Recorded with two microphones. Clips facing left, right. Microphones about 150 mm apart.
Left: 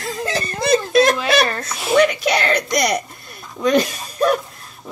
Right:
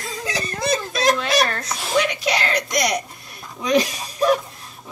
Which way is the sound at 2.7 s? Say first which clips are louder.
Left 3 dB; centre (ahead or behind).